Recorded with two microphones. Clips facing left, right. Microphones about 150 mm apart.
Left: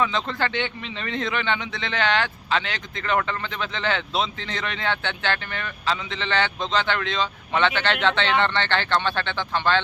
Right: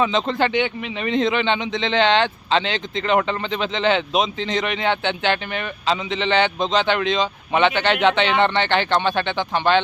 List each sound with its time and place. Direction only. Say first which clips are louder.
0.0 s speech: right 5 dB; 20° right (ahead or behind)